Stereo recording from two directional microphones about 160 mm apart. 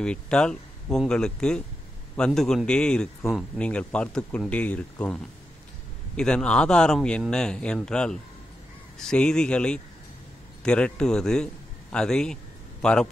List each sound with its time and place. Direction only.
0.0 s a man's voice: 5° left (ahead or behind)